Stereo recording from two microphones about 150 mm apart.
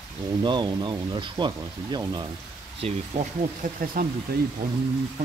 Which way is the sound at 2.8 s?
40° right (ahead or behind).